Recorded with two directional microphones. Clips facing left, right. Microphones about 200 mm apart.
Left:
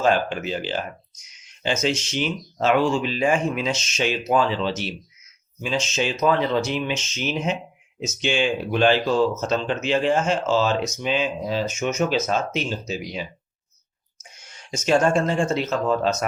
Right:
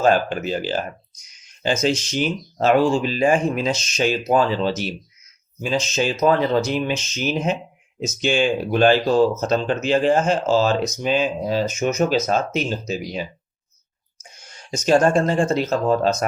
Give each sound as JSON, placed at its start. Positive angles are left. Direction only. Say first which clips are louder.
{"t": 0.0, "sound": "speech", "louder": "right 3 dB", "side_deg": -45}
{"t": 14.2, "sound": "a sound", "louder": "right 3 dB", "side_deg": -35}
{"t": 14.8, "sound": "speech", "louder": "right 3 dB", "side_deg": -35}